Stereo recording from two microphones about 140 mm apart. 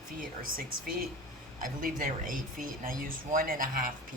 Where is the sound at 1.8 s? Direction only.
75° right (ahead or behind).